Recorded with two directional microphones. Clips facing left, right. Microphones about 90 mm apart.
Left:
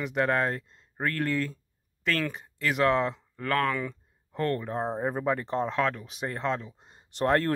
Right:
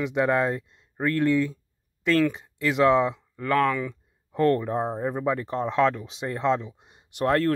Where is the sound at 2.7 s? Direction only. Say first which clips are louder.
Right 5 dB; 20° right (ahead or behind).